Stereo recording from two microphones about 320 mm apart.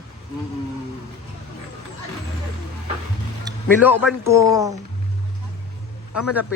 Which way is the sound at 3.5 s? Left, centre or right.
Centre.